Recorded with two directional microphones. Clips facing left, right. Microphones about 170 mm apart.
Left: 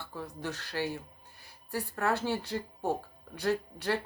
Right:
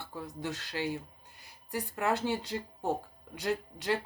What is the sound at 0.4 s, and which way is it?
Speech, 15° right (ahead or behind).